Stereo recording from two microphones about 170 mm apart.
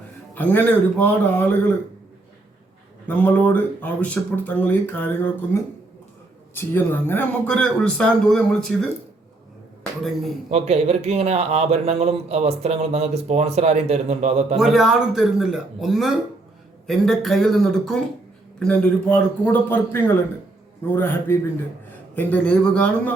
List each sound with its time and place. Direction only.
0.3 s a man's voice: 10° left (ahead or behind)
3.1 s a man's voice: 10° left (ahead or behind)
6.5 s a man's voice: 10° left (ahead or behind)
10.5 s speech: 35° right (ahead or behind)
14.6 s a man's voice: 5° right (ahead or behind)